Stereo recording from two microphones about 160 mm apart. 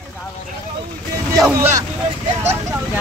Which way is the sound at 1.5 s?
20° right (ahead or behind).